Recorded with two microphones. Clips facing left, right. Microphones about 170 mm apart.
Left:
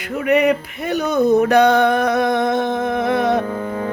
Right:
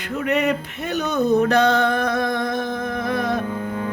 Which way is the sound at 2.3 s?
25° left (ahead or behind).